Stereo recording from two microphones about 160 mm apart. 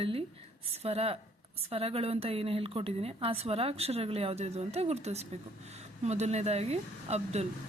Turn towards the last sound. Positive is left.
turn(degrees=-40)  # may be behind; listen again after turning